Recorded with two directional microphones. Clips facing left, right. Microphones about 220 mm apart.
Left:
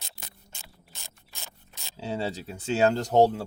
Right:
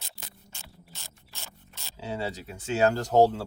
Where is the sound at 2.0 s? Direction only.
30° left (ahead or behind).